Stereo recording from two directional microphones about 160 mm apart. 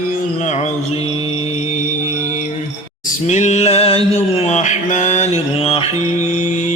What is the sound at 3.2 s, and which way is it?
Mantra, 45° left (ahead or behind).